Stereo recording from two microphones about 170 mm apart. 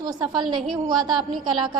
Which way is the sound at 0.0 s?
25° right (ahead or behind).